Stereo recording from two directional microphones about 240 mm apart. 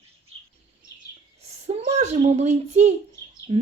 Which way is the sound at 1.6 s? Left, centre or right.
Right.